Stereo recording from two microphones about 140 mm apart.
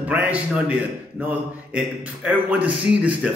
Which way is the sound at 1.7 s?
10° right (ahead or behind).